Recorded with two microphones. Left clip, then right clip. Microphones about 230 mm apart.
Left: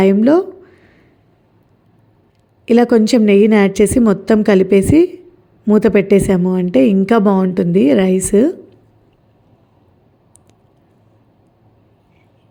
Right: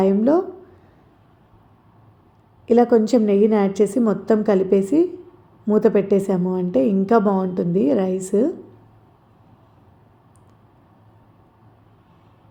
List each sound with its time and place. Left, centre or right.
0.0 s a woman's voice: left
2.6 s a woman's voice: left